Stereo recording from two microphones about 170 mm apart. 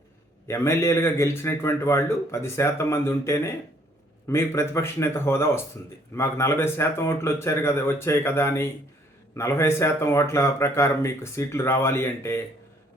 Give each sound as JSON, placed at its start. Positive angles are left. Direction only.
{"t": 0.4, "sound": "speech", "side_deg": 15}